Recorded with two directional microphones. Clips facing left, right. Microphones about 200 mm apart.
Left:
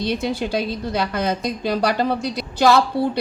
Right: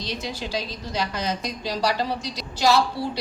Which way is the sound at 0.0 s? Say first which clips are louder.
Left 9 dB; 55° left (ahead or behind).